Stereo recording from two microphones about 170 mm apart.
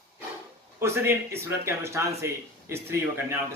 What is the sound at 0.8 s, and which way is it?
Speech, 15° right (ahead or behind).